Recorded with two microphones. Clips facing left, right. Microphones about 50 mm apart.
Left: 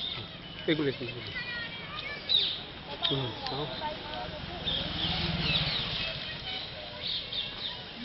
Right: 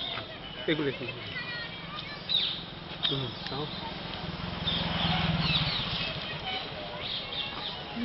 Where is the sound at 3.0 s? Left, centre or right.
Centre.